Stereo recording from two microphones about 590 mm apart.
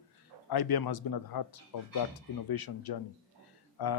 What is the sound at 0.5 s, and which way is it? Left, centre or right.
Speech, left.